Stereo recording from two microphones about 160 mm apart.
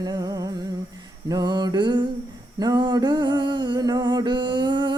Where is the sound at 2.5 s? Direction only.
25° right (ahead or behind).